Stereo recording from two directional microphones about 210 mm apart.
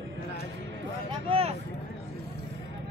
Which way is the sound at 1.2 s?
30° right (ahead or behind).